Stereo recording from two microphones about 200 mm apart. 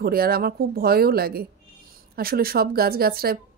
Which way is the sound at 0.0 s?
50° right (ahead or behind).